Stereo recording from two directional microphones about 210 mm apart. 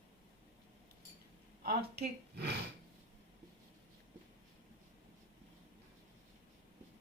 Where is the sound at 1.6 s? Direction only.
45° right (ahead or behind).